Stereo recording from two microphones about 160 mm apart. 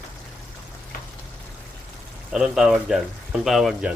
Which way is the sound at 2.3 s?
5° right (ahead or behind).